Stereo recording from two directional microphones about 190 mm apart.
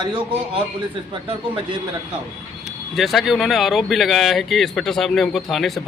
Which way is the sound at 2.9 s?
Centre (ahead or behind).